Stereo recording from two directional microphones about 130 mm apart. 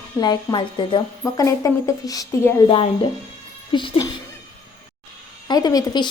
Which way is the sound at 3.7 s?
35° left (ahead or behind).